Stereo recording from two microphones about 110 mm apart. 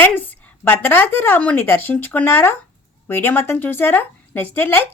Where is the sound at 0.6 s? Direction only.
20° left (ahead or behind).